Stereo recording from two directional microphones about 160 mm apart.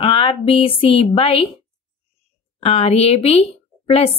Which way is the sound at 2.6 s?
40° left (ahead or behind).